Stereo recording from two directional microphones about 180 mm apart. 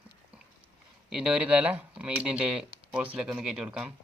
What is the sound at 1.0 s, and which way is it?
Speech, 5° right (ahead or behind).